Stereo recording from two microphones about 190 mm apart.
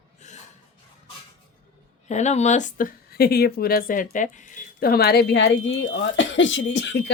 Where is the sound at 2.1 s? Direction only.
35° left (ahead or behind); by 7.0 s 70° left (ahead or behind).